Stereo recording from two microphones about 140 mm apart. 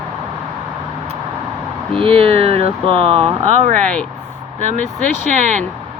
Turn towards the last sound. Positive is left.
turn(degrees=-60)  # may be behind; listen again after turning